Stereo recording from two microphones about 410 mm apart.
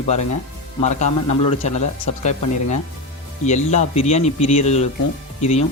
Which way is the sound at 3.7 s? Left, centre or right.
Centre.